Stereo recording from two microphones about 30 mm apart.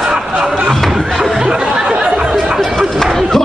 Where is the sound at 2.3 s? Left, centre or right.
Centre.